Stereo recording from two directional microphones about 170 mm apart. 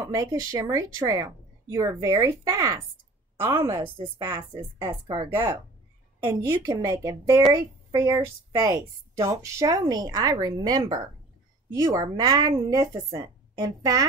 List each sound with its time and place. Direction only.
0.0 s a woman's voice: 20° right (ahead or behind)
4.4 s a woman's voice: 30° right (ahead or behind)
5.3 s a woman's voice: 15° right (ahead or behind)
6.6 s a woman's voice: 25° right (ahead or behind)